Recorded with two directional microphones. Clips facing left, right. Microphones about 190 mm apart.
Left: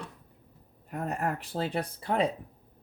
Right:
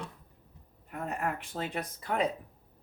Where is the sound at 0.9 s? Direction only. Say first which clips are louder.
Left 3 dB; 40° left (ahead or behind).